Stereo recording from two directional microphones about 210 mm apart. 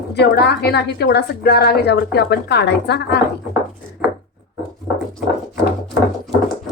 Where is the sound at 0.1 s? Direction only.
50° left (ahead or behind).